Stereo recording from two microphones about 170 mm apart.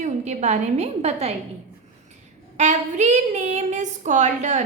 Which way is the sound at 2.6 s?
45° right (ahead or behind).